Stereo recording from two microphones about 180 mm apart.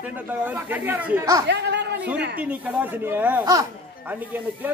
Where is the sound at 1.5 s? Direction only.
70° right (ahead or behind).